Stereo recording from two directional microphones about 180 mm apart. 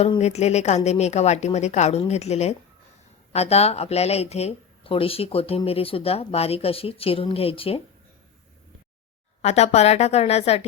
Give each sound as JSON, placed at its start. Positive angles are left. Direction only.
{"t": 0.0, "sound": "speech", "side_deg": 35}
{"t": 9.4, "sound": "speech", "side_deg": 40}